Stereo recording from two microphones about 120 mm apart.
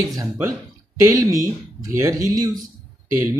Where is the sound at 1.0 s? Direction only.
30° right (ahead or behind).